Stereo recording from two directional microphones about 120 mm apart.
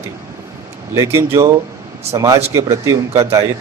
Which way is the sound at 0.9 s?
25° right (ahead or behind).